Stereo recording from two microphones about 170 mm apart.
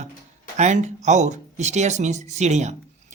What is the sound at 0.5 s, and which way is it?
Speech, 45° right (ahead or behind).